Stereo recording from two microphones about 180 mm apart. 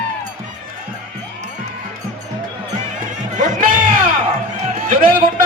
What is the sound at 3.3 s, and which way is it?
Music, 45° right (ahead or behind).